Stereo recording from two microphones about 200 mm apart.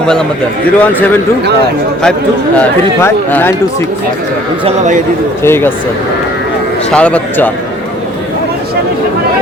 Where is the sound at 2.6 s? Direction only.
10° left (ahead or behind).